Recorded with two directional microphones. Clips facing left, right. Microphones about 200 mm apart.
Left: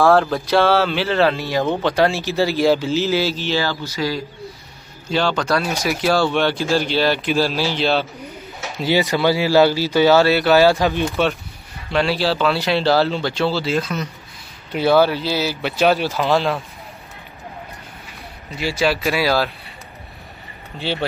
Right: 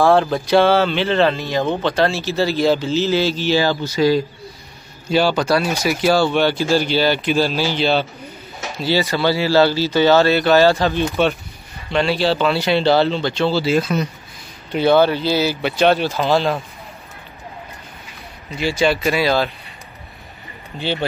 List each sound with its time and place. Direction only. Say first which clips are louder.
0.0 s speech: even; centre (ahead or behind)
3.4 s speech: right 4 dB; 15° right (ahead or behind)
5.1 s speech: right 3 dB; 10° right (ahead or behind)
8.7 s speech: left 1 dB; 15° left (ahead or behind); by 14.0 s 10° right (ahead or behind)
14.7 s speech: right 1 dB; 5° left (ahead or behind)
18.5 s speech: right 2 dB; centre (ahead or behind)